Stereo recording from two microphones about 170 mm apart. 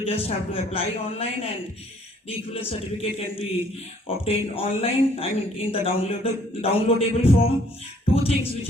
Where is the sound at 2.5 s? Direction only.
35° left (ahead or behind).